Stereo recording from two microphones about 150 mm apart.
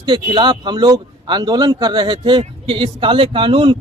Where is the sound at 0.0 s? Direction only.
30° right (ahead or behind).